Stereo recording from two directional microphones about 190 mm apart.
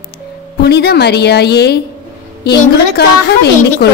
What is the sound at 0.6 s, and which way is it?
A woman's voice, 60° left (ahead or behind).